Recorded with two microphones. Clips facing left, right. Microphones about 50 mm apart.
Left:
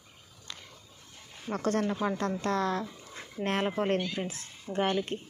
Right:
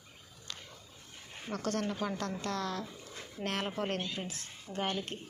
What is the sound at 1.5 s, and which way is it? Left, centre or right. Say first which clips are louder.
Speech: left 5 dB; left.